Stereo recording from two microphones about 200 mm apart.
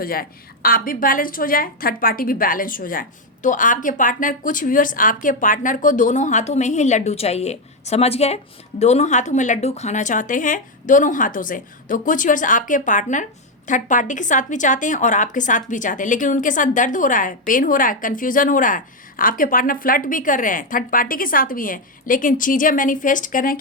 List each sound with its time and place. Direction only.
0.0 s a woman's voice: 45° left (ahead or behind)